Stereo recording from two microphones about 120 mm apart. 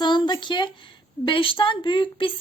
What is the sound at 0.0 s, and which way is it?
A woman's voice, 40° left (ahead or behind).